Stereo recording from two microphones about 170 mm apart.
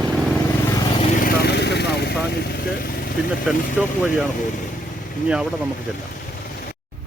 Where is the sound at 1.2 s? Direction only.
60° left (ahead or behind).